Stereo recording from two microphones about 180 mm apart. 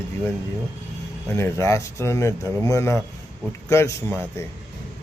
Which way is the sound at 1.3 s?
15° left (ahead or behind).